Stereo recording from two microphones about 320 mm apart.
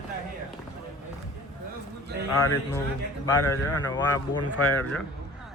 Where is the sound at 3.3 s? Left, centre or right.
Centre.